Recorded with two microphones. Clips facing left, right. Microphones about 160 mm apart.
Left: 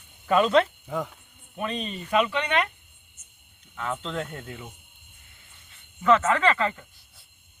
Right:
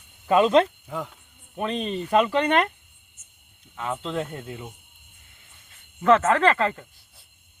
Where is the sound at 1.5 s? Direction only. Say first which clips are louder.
Right 4 dB; 35° right (ahead or behind).